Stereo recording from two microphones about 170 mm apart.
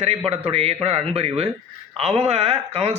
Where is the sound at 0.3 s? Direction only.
35° right (ahead or behind).